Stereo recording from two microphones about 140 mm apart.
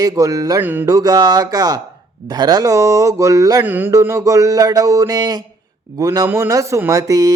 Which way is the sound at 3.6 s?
15° right (ahead or behind).